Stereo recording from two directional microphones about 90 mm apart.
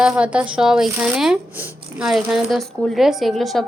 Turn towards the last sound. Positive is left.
turn(degrees=0)  # may be behind; listen again after turning